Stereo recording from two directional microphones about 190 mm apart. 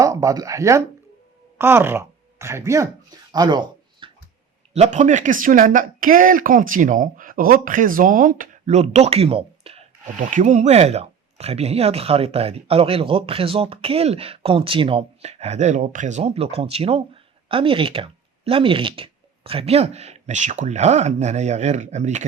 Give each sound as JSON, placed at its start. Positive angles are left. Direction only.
{"t": 0.0, "sound": "speech", "side_deg": -15}
{"t": 4.7, "sound": "speech", "side_deg": -35}